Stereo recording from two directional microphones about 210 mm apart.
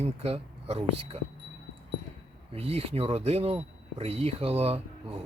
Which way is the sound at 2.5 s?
30° right (ahead or behind).